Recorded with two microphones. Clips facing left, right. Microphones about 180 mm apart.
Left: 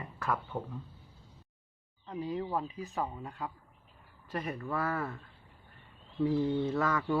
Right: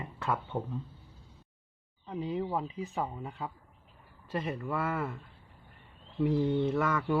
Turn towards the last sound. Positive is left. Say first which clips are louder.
# right 1 dB
turn(degrees=0)  # may be behind; listen again after turning